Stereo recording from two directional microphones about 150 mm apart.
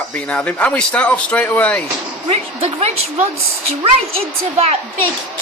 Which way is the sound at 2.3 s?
45° right (ahead or behind).